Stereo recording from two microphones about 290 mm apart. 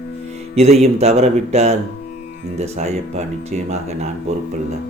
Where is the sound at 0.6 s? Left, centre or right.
Right.